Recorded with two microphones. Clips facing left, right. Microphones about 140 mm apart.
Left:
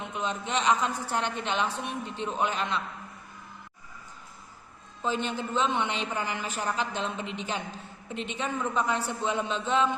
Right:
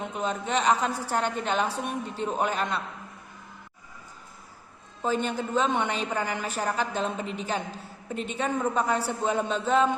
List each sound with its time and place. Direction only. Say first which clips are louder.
0.0 s a woman's voice: right 3 dB; 40° right (ahead or behind)
5.0 s a woman's voice: right 3 dB; 45° right (ahead or behind)